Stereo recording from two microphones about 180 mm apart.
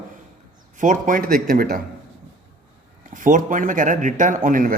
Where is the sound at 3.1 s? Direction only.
45° right (ahead or behind).